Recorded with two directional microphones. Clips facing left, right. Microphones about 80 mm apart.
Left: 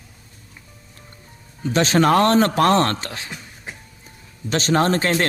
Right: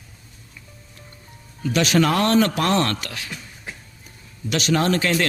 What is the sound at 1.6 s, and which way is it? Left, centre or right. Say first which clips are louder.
A man's voice: left 1 dB; left.